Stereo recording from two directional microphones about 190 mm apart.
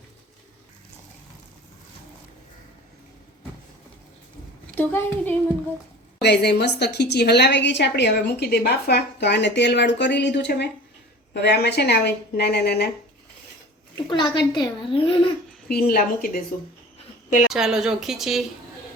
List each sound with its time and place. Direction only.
4.7 s a woman's voice: 10° left (ahead or behind)
6.2 s a woman's voice: 60° left (ahead or behind)
14.1 s a woman's voice: 25° left (ahead or behind)
15.7 s a woman's voice: 50° left (ahead or behind)
17.2 s a sound: 45° left (ahead or behind)
17.5 s a woman's voice: centre (ahead or behind)